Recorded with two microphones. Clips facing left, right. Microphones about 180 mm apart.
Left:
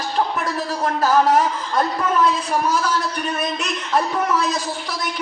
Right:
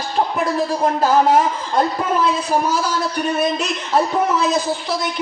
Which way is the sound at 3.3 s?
30° right (ahead or behind).